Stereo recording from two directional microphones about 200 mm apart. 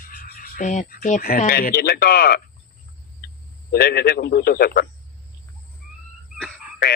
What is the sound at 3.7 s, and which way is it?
Speech, 50° left (ahead or behind).